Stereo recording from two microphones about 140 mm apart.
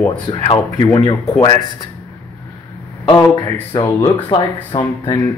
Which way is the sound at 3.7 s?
35° left (ahead or behind).